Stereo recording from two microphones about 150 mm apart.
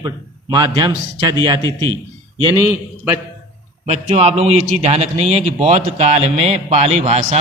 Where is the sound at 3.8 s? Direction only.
45° right (ahead or behind).